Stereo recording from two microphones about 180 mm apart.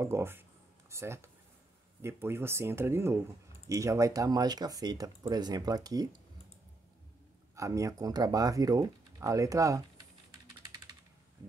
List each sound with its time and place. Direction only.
0.0 s a sound: 15° right (ahead or behind)
2.0 s speech: 15° right (ahead or behind)
7.5 s speech: 15° right (ahead or behind)